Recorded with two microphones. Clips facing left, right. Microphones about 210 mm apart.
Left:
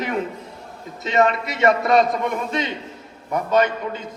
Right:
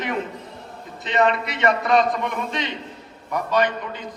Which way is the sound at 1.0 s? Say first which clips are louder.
Left 1 dB; 45° left (ahead or behind).